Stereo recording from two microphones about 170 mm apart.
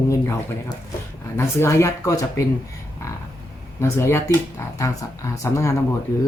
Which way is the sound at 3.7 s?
15° left (ahead or behind).